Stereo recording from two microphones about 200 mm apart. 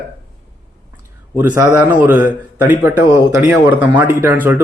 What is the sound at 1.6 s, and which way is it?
Speech, 10° right (ahead or behind).